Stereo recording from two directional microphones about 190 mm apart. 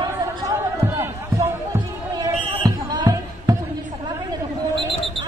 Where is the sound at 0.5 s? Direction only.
15° right (ahead or behind).